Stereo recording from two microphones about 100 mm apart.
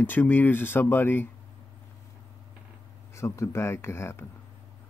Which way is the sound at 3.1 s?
30° left (ahead or behind).